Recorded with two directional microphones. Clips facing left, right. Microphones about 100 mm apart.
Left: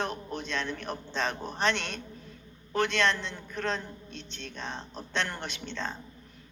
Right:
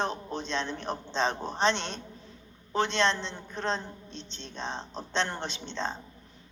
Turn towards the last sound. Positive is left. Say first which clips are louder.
# right 2 dB
turn(degrees=-25)  # may be behind; listen again after turning